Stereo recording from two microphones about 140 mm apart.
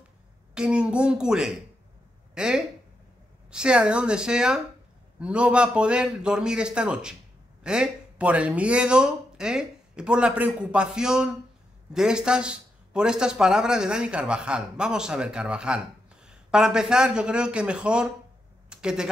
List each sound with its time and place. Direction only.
0.6 s speech: 5° right (ahead or behind)